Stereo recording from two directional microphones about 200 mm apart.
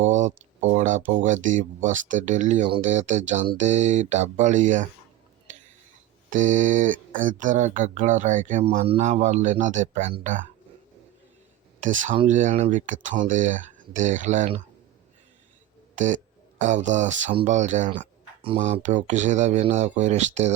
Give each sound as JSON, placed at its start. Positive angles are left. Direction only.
{"t": 0.1, "sound": "a sound", "side_deg": -35}
{"t": 1.2, "sound": "speech", "side_deg": -40}
{"t": 6.3, "sound": "speech", "side_deg": -40}
{"t": 11.8, "sound": "speech", "side_deg": -40}
{"t": 16.0, "sound": "speech", "side_deg": -40}